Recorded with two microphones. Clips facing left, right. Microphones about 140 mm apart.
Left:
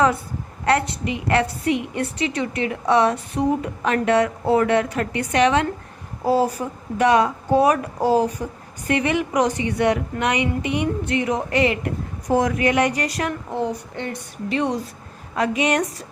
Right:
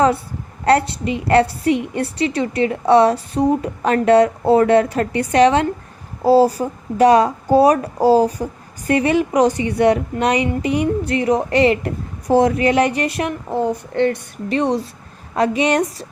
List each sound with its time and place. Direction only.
0.6 s a woman's voice: 35° right (ahead or behind)
13.9 s a woman's voice: 65° right (ahead or behind)
14.5 s a woman's voice: 35° right (ahead or behind)